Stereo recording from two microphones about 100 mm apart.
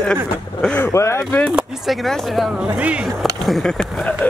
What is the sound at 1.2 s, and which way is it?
Speech, 15° left (ahead or behind).